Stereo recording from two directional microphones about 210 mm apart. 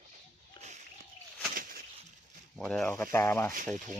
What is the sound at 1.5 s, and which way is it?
Bird flight, 45° right (ahead or behind).